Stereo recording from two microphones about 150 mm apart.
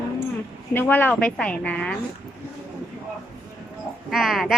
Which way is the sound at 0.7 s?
15° left (ahead or behind).